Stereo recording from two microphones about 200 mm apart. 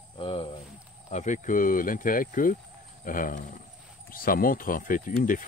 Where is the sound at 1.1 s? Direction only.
35° left (ahead or behind).